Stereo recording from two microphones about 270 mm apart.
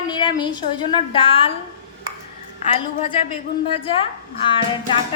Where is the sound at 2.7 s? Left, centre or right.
Left.